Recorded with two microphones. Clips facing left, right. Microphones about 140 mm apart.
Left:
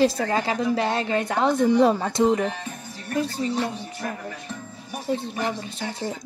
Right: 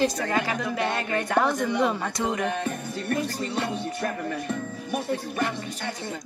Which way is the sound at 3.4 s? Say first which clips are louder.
Left 2 dB; 60° right (ahead or behind).